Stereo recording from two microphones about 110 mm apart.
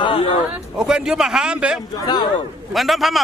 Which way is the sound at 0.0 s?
55° left (ahead or behind).